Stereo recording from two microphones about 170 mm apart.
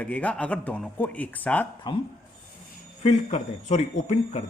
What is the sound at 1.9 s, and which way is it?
Speech, 25° left (ahead or behind).